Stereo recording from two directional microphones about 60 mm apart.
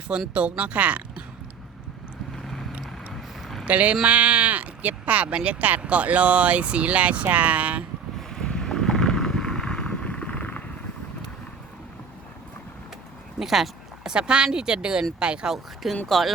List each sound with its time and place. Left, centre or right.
0.3 s speech: centre
2.3 s vehicle: centre
3.7 s speech: right
8.3 s vehicle: centre
13.4 s a sound: centre
14.1 s speech: centre
15.5 s speech: centre